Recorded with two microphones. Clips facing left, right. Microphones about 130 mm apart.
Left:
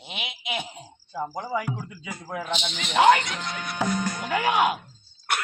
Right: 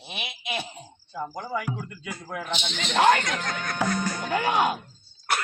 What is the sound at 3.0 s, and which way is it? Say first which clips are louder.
Speech: left 2 dB; 15° left (ahead or behind).